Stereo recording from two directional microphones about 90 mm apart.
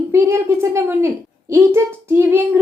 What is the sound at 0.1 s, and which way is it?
A woman's voice, 30° right (ahead or behind).